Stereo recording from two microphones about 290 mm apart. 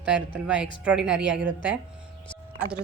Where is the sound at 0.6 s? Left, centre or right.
Centre.